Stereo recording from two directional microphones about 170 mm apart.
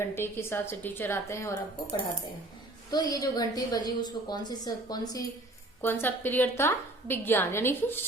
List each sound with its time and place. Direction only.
0.0 s a woman's voice: 15° left (ahead or behind)
2.9 s a woman's voice: 25° left (ahead or behind)